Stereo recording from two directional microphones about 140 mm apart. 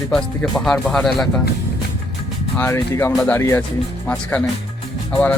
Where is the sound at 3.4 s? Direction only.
20° left (ahead or behind).